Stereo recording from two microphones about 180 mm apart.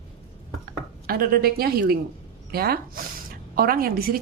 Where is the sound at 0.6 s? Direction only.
55° right (ahead or behind).